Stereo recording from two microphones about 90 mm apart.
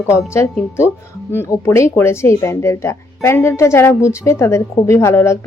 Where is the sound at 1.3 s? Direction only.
30° left (ahead or behind).